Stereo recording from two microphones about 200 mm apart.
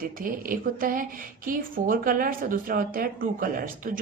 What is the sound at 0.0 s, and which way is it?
A woman's voice, 45° right (ahead or behind).